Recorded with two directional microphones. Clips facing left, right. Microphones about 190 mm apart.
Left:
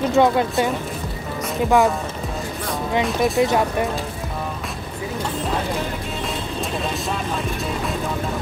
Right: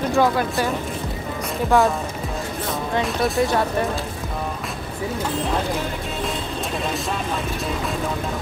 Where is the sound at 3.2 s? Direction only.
15° left (ahead or behind).